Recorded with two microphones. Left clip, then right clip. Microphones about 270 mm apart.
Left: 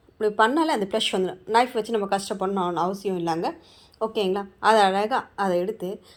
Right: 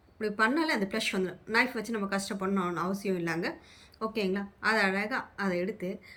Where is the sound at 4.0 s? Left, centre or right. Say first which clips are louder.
Left 7 dB; centre.